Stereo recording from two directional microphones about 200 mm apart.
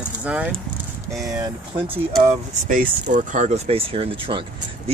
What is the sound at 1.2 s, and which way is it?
Speech, 20° right (ahead or behind).